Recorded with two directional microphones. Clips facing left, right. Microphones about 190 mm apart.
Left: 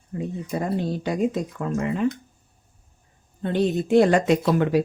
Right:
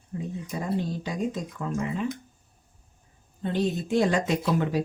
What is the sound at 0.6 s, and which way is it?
Speech, 65° left (ahead or behind).